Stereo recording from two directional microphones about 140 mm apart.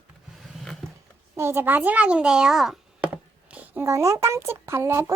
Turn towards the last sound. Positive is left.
turn(degrees=-20)  # may be behind; listen again after turning